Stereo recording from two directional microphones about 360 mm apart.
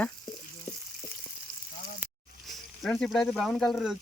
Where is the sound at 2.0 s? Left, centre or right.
Centre.